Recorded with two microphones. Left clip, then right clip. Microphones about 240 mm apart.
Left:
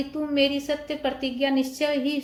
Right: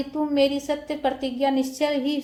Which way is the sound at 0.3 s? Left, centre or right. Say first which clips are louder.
Right 1 dB; right.